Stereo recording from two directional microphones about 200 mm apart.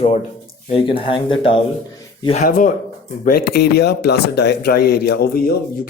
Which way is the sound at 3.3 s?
55° left (ahead or behind).